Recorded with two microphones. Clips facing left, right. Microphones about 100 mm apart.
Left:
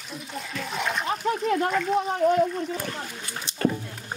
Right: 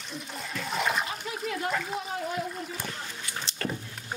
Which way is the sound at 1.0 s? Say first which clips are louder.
Left 9 dB; 50° left (ahead or behind).